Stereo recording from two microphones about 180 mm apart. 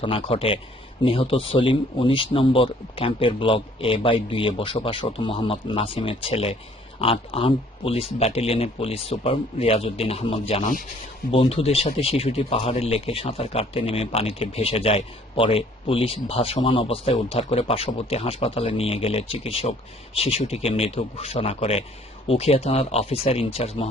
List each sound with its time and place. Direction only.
0.0 s speech: 30° left (ahead or behind)
11.3 s speech: 30° left (ahead or behind)